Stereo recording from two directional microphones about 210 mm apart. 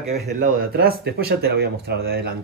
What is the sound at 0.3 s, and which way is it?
Speech, 45° right (ahead or behind).